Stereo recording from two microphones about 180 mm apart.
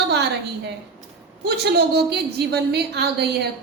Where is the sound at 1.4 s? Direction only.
60° right (ahead or behind).